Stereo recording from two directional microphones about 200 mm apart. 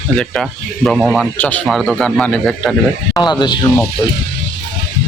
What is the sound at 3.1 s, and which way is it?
Speech, 20° left (ahead or behind).